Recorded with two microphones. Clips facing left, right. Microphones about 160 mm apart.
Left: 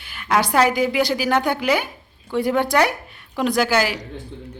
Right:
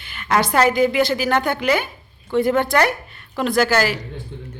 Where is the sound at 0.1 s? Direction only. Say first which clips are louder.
Even; 10° left (ahead or behind).